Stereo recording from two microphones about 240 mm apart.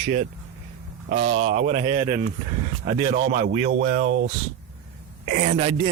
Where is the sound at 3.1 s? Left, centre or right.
Right.